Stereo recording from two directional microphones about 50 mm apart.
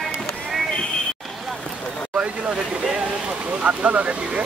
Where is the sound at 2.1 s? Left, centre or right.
Right.